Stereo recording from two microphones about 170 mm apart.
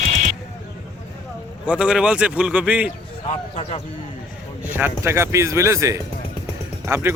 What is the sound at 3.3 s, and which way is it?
Speech, 35° left (ahead or behind).